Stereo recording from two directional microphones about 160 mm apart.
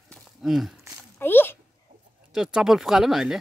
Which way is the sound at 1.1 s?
15° left (ahead or behind).